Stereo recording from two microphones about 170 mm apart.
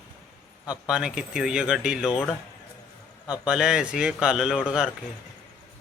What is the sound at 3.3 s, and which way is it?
Speech, 5° right (ahead or behind).